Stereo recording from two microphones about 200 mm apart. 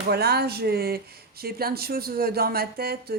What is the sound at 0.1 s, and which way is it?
Speech, 55° right (ahead or behind).